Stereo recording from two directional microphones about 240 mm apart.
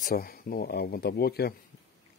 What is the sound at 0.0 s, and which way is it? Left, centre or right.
Speech, left.